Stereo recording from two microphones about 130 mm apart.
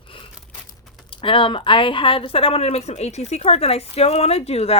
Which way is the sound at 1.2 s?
40° left (ahead or behind).